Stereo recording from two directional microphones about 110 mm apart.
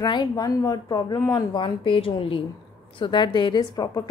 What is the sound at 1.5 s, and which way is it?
A woman's voice, 50° left (ahead or behind).